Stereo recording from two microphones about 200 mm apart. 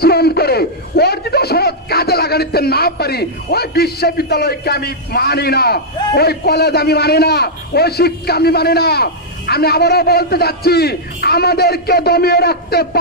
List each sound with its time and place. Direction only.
0.0 s speech: 50° left (ahead or behind)